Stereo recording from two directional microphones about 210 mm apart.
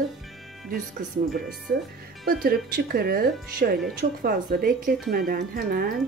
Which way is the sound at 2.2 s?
45° right (ahead or behind).